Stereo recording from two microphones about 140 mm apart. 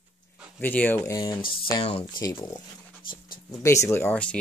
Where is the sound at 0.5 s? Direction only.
15° left (ahead or behind).